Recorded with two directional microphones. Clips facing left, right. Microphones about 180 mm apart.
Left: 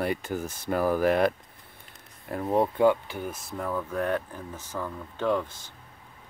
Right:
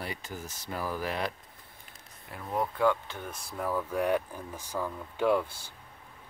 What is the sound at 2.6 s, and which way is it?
Speech, 20° left (ahead or behind).